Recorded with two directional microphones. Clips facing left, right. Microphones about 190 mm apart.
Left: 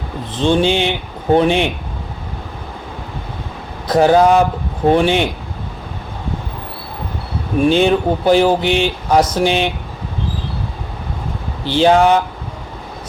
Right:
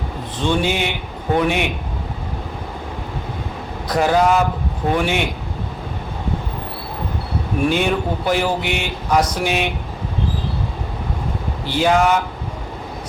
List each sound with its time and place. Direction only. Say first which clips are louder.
0.3 s speech: left 5 dB; 25° left (ahead or behind)
3.8 s speech: left 5 dB; 30° left (ahead or behind)
7.7 s speech: left 8 dB; 30° left (ahead or behind)
11.6 s speech: left 5 dB; 30° left (ahead or behind)